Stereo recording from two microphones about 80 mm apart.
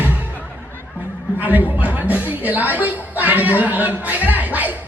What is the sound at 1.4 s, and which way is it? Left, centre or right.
A woman's voice, right.